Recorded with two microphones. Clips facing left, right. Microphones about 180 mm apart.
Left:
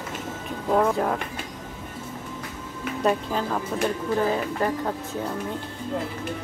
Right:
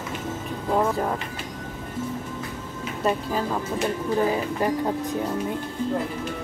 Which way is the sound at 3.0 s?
Centre (ahead or behind).